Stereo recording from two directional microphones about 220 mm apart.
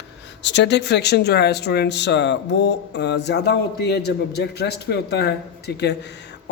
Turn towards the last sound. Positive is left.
turn(degrees=50)  # may be behind; listen again after turning